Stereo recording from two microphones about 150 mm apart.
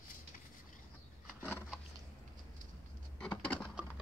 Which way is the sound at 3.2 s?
10° left (ahead or behind).